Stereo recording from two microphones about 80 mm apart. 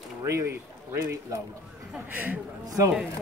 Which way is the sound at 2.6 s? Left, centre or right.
Right.